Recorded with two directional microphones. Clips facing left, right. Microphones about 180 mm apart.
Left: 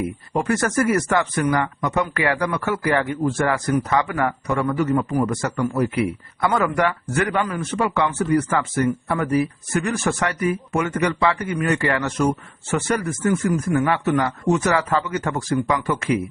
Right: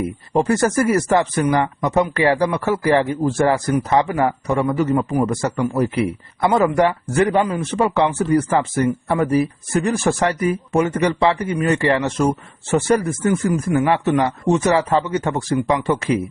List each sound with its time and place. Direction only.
0.3 s speech: 30° right (ahead or behind)